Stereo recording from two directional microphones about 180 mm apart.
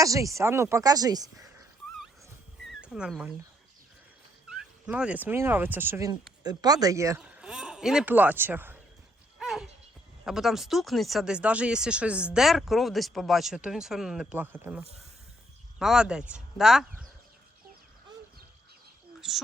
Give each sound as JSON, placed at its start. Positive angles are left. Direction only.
{"t": 0.0, "sound": "speech", "side_deg": -20}
{"t": 2.6, "sound": "speech", "side_deg": -5}
{"t": 4.5, "sound": "speech", "side_deg": -5}
{"t": 7.2, "sound": "speech", "side_deg": -5}
{"t": 9.4, "sound": "a sound", "side_deg": 0}
{"t": 10.2, "sound": "speech", "side_deg": 0}
{"t": 19.2, "sound": "speech", "side_deg": -5}